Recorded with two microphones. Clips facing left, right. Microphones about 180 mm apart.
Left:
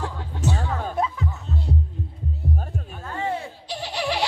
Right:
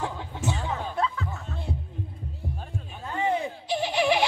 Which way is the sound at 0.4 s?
40° left (ahead or behind).